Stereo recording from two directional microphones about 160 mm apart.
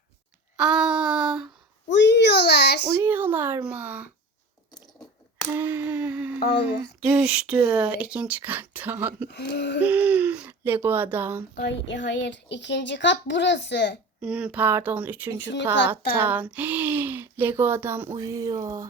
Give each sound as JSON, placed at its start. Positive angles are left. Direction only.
{"t": 0.5, "sound": "a sound", "side_deg": -5}
{"t": 1.9, "sound": "a sound", "side_deg": 90}
{"t": 3.0, "sound": "speech", "side_deg": -10}
{"t": 5.5, "sound": "a sound", "side_deg": -10}
{"t": 7.0, "sound": "speech", "side_deg": -10}
{"t": 9.3, "sound": "speech", "side_deg": 90}
{"t": 9.8, "sound": "speech", "side_deg": -10}
{"t": 11.5, "sound": "speech", "side_deg": 90}
{"t": 14.2, "sound": "speech", "side_deg": -5}